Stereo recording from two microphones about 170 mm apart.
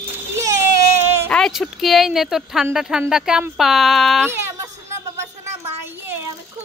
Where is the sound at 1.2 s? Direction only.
5° left (ahead or behind).